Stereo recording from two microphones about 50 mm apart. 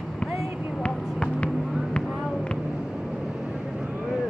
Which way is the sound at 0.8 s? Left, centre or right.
Left.